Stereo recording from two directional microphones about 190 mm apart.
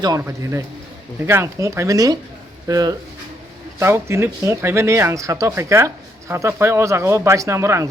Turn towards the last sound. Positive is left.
turn(degrees=-15)  # may be behind; listen again after turning